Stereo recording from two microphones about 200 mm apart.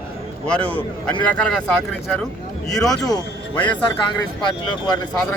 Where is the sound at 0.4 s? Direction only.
5° left (ahead or behind).